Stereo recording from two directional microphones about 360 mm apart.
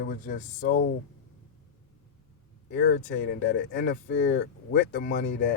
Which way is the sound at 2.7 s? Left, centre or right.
Left.